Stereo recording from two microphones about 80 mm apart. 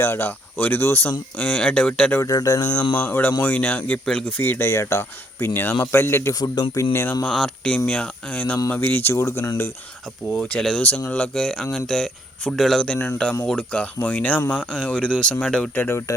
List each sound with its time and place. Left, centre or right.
0.0 s speech: left
1.4 s speech: centre
2.2 s speech: left
3.0 s speech: left
4.4 s speech: left
6.6 s speech: left
6.9 s speech: left
7.3 s speech: centre; by 9.5 s left
10.5 s speech: centre
15.7 s speech: left